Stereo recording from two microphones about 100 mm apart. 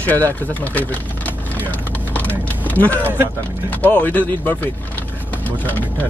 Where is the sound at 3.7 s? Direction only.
15° left (ahead or behind).